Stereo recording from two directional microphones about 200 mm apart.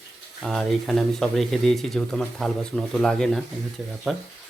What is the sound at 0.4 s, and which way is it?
Speech, centre (ahead or behind).